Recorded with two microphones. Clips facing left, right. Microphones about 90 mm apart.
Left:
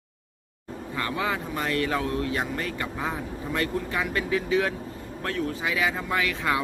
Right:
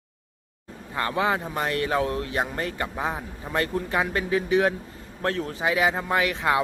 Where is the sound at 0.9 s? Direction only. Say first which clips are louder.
Right 4 dB; 35° right (ahead or behind).